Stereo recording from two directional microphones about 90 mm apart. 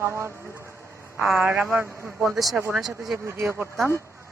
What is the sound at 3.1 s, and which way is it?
Speech, 30° right (ahead or behind).